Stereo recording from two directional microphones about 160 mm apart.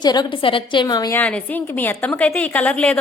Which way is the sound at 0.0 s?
25° left (ahead or behind).